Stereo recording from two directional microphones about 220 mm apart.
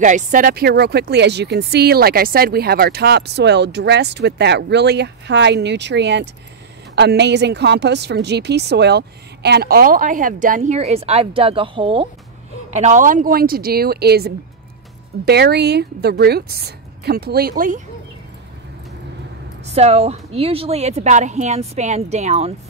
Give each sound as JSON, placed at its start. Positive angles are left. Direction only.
{"t": 0.0, "sound": "speech", "side_deg": -35}
{"t": 12.7, "sound": "speech", "side_deg": -35}
{"t": 19.6, "sound": "a woman's voice", "side_deg": -30}